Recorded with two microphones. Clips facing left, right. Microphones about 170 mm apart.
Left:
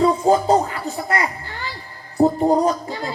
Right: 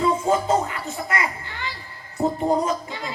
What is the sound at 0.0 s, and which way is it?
Music, 35° left (ahead or behind).